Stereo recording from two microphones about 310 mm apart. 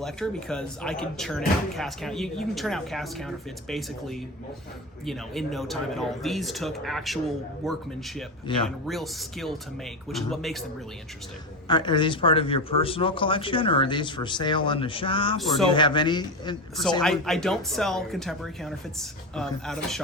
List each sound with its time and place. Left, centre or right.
0.0 s speech: centre
8.5 s speech: centre
8.9 s speech: centre
11.7 s speech: centre
17.0 s speech: centre